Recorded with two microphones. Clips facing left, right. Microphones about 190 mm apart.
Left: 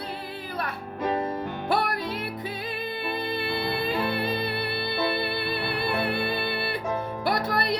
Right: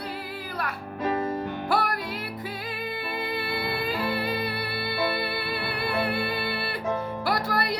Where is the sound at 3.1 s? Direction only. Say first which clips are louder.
Left 1 dB; 20° left (ahead or behind).